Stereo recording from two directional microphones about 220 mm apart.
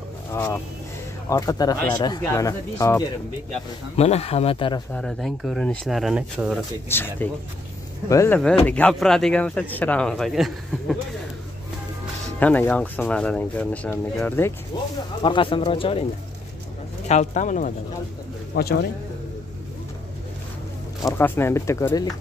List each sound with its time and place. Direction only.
0.3 s speech: 10° left (ahead or behind)
3.9 s speech: 30° left (ahead or behind)
4.9 s speech: centre (ahead or behind)
6.9 s speech: 10° left (ahead or behind)
12.4 s speech: 5° left (ahead or behind); by 16.1 s 25° left (ahead or behind)
17.1 s speech: 35° left (ahead or behind)
18.5 s speech: 45° left (ahead or behind)
21.0 s speech: 10° left (ahead or behind)